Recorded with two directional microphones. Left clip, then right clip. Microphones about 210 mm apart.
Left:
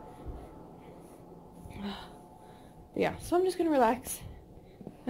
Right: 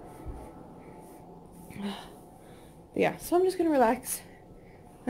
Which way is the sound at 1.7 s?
15° right (ahead or behind).